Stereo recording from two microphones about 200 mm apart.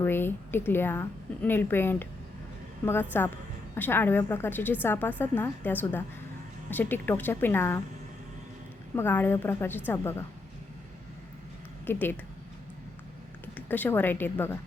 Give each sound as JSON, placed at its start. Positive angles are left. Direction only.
{"t": 0.0, "sound": "a woman's voice", "side_deg": 10}
{"t": 9.0, "sound": "a woman's voice", "side_deg": 10}
{"t": 11.9, "sound": "a woman's voice", "side_deg": 10}
{"t": 13.4, "sound": "speech", "side_deg": 10}